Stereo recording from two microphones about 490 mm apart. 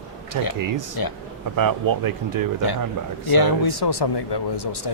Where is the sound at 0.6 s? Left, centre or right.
Right.